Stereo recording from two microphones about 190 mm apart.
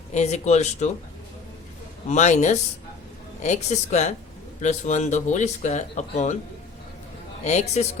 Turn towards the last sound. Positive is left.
turn(degrees=35)  # may be behind; listen again after turning